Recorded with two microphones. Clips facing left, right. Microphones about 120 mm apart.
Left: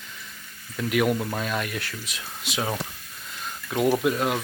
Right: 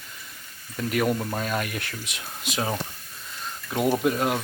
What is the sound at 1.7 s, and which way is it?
Speech, 60° right (ahead or behind).